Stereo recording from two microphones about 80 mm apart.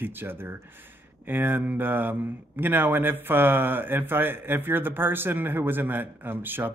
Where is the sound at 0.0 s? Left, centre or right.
Right.